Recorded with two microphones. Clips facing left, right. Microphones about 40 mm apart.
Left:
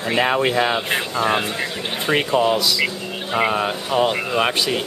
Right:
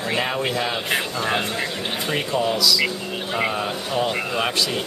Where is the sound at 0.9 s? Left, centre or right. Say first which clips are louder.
Left 3 dB; centre.